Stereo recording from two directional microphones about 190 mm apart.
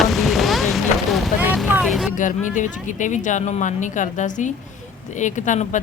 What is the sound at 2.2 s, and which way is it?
Speech, 40° left (ahead or behind).